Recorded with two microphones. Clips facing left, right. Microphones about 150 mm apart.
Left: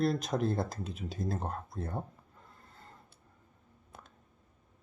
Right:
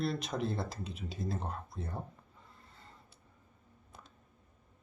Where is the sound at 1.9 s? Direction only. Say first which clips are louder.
Left 4 dB; centre (ahead or behind).